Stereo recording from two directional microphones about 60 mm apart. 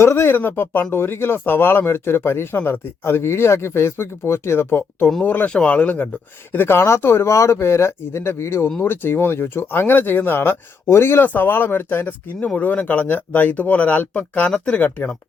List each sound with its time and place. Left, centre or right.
0.0 s speech: left
6.5 s speech: left; by 14.8 s centre
14.8 s speech: left